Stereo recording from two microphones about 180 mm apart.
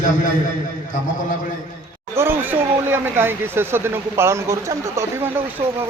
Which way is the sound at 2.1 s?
15° right (ahead or behind).